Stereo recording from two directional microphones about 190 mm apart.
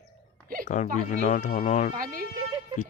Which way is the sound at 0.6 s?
40° left (ahead or behind).